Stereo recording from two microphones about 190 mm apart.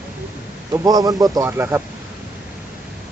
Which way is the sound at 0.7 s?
20° right (ahead or behind).